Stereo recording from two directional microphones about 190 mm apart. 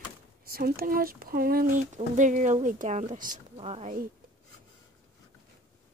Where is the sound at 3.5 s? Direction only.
30° right (ahead or behind).